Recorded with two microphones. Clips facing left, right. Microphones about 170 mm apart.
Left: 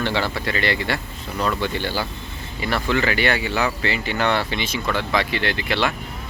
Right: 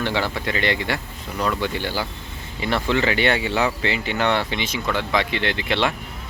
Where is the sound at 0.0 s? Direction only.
15° right (ahead or behind).